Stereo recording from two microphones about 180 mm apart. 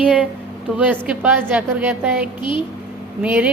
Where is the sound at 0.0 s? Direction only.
5° right (ahead or behind).